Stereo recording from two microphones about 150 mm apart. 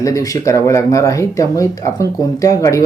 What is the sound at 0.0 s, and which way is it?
Speech, 20° left (ahead or behind).